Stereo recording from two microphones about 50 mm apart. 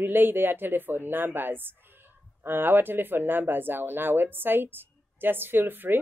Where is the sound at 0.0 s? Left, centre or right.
Right.